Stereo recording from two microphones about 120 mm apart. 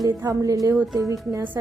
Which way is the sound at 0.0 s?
25° right (ahead or behind).